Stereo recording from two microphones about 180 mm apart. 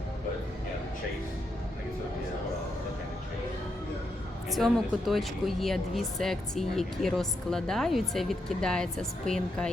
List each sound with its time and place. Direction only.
4.4 s speech: centre (ahead or behind)